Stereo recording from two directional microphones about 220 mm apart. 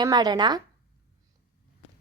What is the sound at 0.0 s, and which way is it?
Speech, 15° right (ahead or behind).